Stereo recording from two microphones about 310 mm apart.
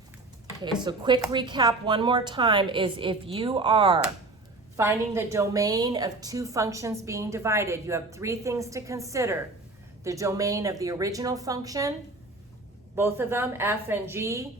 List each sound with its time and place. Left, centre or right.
0.6 s a woman's voice: centre
13.0 s a woman's voice: centre